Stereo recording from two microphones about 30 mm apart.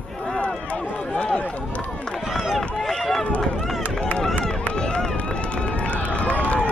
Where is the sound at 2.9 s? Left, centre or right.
Centre.